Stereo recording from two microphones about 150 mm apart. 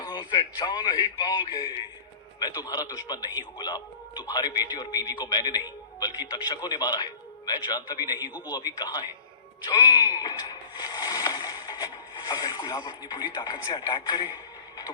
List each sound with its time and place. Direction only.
0.0 s speech: 30° left (ahead or behind)